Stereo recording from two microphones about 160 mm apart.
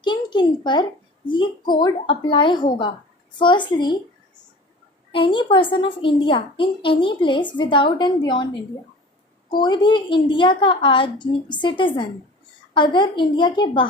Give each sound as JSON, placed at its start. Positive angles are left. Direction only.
{"t": 0.0, "sound": "a woman's voice", "side_deg": 30}
{"t": 5.1, "sound": "a woman's voice", "side_deg": 30}
{"t": 9.5, "sound": "a woman's voice", "side_deg": 30}